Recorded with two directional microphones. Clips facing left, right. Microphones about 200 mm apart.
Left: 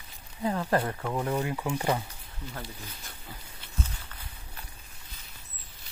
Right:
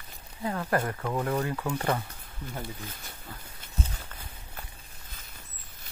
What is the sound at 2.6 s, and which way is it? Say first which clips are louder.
Speech: right 3 dB; 50° right (ahead or behind).